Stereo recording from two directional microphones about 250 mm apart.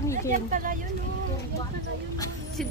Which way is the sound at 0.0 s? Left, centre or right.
Centre.